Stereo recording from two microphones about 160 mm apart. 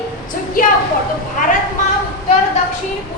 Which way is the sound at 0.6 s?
60° left (ahead or behind).